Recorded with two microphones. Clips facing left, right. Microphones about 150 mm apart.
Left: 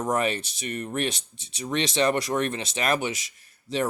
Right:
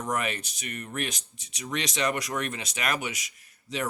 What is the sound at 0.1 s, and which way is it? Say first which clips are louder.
Speech: left 4 dB; 30° left (ahead or behind).